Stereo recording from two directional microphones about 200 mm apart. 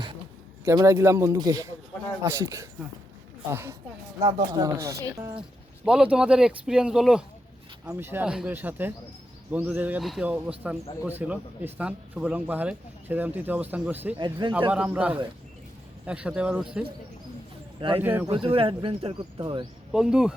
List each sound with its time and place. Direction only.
0.6 s speech: 15° right (ahead or behind)
5.4 s speech: 5° right (ahead or behind)
14.2 s speech: 25° right (ahead or behind)
14.7 s speech: 5° right (ahead or behind)
17.9 s speech: 10° right (ahead or behind)
18.3 s speech: 30° right (ahead or behind)
19.9 s speech: 5° right (ahead or behind)